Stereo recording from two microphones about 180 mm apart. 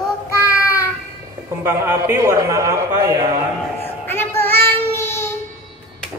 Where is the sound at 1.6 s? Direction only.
15° right (ahead or behind).